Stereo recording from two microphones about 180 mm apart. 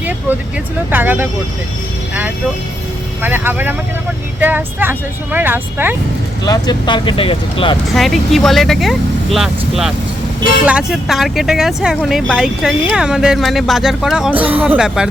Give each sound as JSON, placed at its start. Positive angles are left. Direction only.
{"t": 0.9, "sound": "speech", "side_deg": -10}
{"t": 3.2, "sound": "speech", "side_deg": -10}
{"t": 6.4, "sound": "speech", "side_deg": 25}
{"t": 7.9, "sound": "speech", "side_deg": 0}